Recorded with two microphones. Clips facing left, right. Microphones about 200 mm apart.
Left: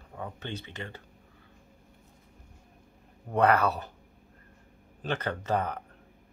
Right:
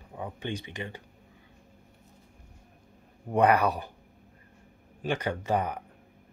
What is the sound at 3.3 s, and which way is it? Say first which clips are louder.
Speech: right 1 dB; 15° right (ahead or behind).